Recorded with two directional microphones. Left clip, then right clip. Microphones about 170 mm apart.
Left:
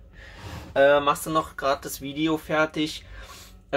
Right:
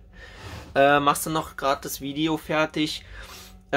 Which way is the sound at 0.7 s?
50° right (ahead or behind).